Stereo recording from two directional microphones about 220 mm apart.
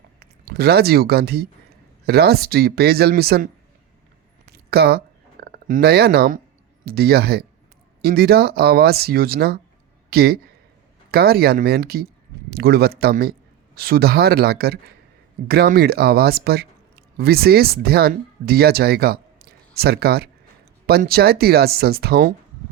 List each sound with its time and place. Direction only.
0.2 s speech: 45° right (ahead or behind)
4.5 s a sound: 45° right (ahead or behind)
6.8 s speech: 45° right (ahead or behind)